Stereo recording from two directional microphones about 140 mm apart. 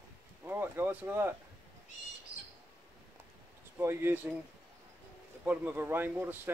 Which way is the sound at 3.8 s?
15° right (ahead or behind).